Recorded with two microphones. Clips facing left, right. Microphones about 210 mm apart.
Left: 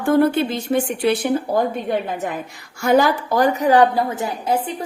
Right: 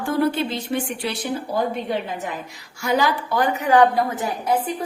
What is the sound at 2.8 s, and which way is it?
A woman's voice, 50° left (ahead or behind).